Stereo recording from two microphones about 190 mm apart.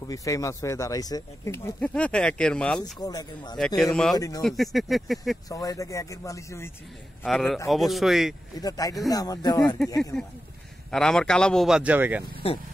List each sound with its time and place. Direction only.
0.1 s speech: 15° left (ahead or behind)
2.8 s speech: 20° left (ahead or behind)
3.5 s speech: centre (ahead or behind)
5.5 s speech: 15° left (ahead or behind)
7.2 s speech: centre (ahead or behind)
8.5 s speech: 20° left (ahead or behind)
10.9 s speech: 5° left (ahead or behind)